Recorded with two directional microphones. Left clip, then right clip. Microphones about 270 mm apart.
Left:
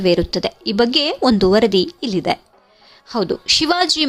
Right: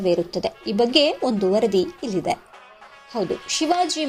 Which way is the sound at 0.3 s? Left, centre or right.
Left.